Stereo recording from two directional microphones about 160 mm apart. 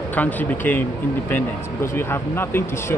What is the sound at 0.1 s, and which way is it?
A man's voice, 10° left (ahead or behind).